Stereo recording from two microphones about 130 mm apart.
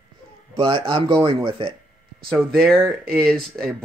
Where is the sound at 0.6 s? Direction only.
40° right (ahead or behind).